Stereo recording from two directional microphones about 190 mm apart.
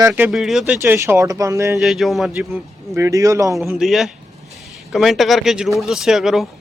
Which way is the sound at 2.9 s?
15° right (ahead or behind).